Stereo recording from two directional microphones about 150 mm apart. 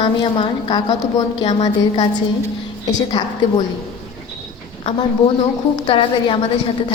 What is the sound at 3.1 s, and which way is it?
Speech, 30° left (ahead or behind).